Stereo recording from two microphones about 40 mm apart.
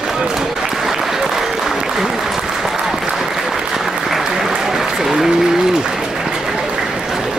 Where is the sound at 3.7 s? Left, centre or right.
Centre.